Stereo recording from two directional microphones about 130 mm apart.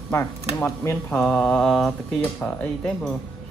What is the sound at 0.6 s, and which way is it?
Speech, 20° left (ahead or behind).